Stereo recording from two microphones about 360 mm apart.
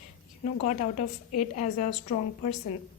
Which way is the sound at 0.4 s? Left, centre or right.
Centre.